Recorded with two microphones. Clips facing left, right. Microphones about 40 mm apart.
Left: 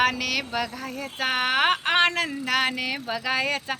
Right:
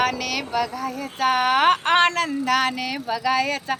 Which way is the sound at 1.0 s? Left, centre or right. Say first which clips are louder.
Right 5 dB; left.